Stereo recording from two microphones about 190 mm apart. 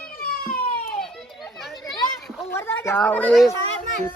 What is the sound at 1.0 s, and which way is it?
Children playing, centre (ahead or behind).